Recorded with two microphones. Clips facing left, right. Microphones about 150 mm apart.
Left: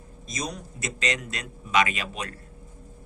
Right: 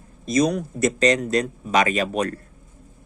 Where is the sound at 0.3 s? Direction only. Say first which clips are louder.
Right 14 dB; 65° right (ahead or behind).